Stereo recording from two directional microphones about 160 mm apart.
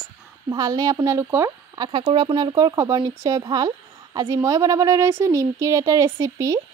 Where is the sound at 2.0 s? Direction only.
35° right (ahead or behind).